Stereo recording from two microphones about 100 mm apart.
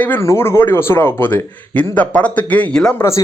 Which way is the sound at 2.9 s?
25° left (ahead or behind).